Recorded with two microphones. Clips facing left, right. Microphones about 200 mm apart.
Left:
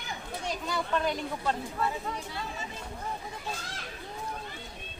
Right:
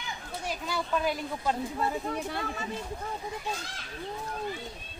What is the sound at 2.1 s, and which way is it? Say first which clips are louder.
Speech: right 4 dB; 55° right (ahead or behind).